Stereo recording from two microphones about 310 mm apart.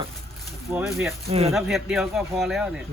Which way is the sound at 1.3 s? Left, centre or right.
Centre.